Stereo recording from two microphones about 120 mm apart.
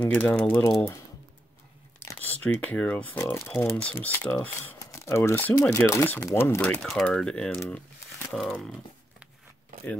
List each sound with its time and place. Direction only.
0.0 s speech: 15° left (ahead or behind)
2.0 s a sound: 15° left (ahead or behind)
2.4 s speech: 10° left (ahead or behind)
4.7 s crumpling: 25° left (ahead or behind)
5.9 s speech: 20° left (ahead or behind)
6.6 s speech: 5° left (ahead or behind)